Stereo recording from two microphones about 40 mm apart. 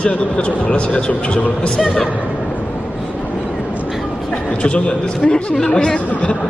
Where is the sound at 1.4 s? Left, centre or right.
Left.